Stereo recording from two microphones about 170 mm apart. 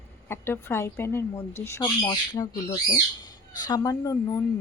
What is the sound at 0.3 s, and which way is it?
A woman's voice, 15° left (ahead or behind).